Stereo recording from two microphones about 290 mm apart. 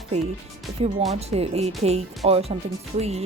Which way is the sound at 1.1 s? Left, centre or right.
Right.